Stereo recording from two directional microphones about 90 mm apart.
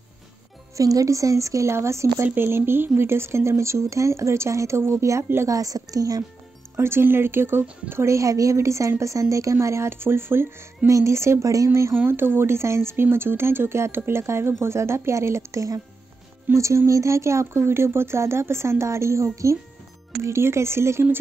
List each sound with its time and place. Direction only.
0.7 s a woman's voice: 40° right (ahead or behind)
6.8 s a woman's voice: 25° right (ahead or behind)